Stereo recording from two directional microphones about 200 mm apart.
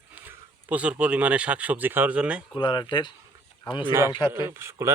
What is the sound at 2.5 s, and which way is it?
Speech, 20° left (ahead or behind).